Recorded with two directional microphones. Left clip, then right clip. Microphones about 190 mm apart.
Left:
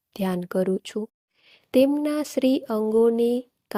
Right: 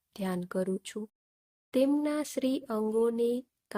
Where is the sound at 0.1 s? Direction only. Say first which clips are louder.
Left 8 dB; 30° left (ahead or behind).